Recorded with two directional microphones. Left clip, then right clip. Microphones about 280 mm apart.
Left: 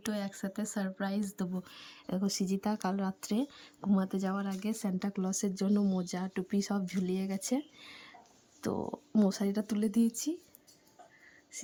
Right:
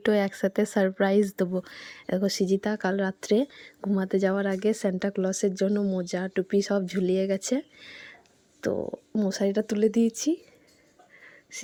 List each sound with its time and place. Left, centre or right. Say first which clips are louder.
0.0 s speech: right 14 dB; centre
9.4 s speech: right 10 dB; centre